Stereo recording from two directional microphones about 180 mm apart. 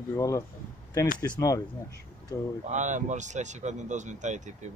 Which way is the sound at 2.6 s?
40° right (ahead or behind).